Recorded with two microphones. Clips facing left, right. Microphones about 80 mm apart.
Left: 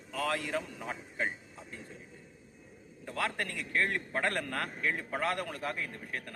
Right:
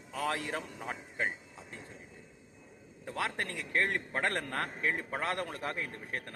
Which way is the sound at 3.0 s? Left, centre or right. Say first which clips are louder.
Left 1 dB; right.